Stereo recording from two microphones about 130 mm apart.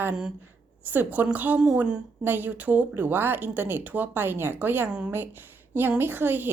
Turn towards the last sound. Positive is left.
turn(degrees=-15)  # may be behind; listen again after turning